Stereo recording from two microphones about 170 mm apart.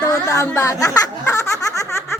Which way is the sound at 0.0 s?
20° left (ahead or behind).